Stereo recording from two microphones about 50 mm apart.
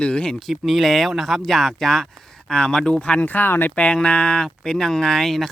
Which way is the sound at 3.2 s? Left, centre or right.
Left.